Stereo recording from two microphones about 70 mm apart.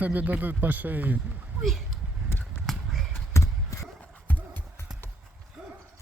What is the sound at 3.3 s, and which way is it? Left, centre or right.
Horse, left.